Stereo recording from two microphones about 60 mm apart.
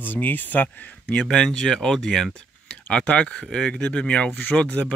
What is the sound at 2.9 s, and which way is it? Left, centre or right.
Speech, centre.